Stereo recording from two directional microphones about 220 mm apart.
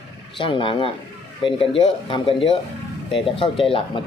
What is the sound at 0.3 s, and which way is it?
Speech, 25° left (ahead or behind).